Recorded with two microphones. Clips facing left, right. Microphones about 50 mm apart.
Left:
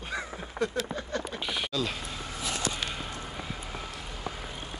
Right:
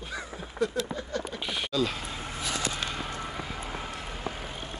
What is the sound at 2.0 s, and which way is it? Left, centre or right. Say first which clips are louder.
Vehicle: right 1 dB; right.